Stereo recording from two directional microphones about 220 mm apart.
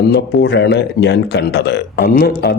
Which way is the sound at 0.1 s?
50° left (ahead or behind).